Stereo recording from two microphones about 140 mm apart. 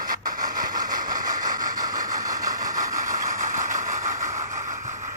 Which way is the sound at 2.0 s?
25° right (ahead or behind).